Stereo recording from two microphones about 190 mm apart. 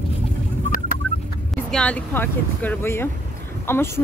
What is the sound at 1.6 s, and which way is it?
Speech, 5° left (ahead or behind).